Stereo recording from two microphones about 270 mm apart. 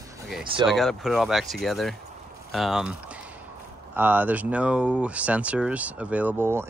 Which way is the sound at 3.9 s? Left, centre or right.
Centre.